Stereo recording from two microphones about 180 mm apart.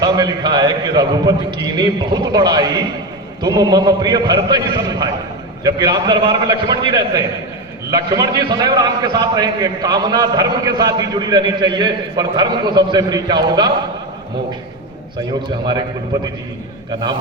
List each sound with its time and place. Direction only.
0.0 s a man's voice: 25° right (ahead or behind)
15.4 s a man's voice: 25° right (ahead or behind)